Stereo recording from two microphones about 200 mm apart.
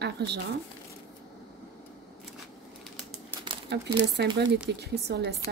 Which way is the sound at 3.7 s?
60° right (ahead or behind).